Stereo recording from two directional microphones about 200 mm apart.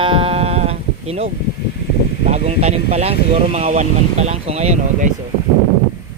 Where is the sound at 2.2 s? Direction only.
35° right (ahead or behind).